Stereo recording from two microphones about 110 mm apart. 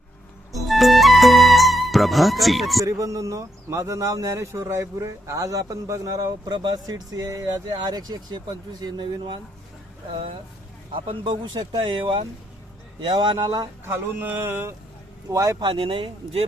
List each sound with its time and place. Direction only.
0.7 s music: centre (ahead or behind)
2.8 s speech: 30° right (ahead or behind)
10.9 s speech: 55° right (ahead or behind)
13.8 s speech: 20° right (ahead or behind)
15.6 s speech: 55° right (ahead or behind)